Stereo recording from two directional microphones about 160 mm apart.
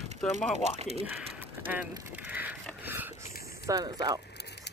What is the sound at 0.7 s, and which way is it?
Speech, 40° right (ahead or behind).